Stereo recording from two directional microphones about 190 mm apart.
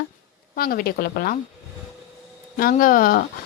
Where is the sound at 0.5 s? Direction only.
50° left (ahead or behind).